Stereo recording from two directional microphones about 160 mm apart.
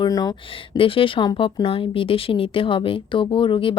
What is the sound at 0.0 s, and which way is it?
Speech, 25° left (ahead or behind).